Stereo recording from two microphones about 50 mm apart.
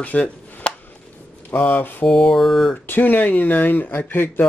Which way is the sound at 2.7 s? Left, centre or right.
Left.